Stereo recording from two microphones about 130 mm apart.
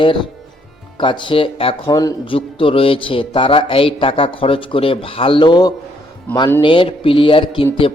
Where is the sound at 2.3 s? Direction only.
45° left (ahead or behind).